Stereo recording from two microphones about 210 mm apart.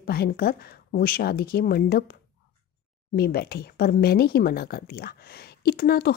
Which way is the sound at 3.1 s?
50° left (ahead or behind).